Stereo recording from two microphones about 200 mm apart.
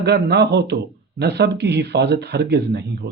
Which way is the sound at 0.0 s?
55° right (ahead or behind).